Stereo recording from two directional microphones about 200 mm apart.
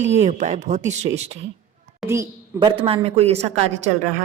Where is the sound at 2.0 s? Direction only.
15° right (ahead or behind); by 4.2 s 35° right (ahead or behind).